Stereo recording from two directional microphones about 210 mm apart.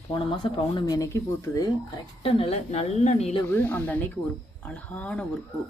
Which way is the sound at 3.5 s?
10° left (ahead or behind).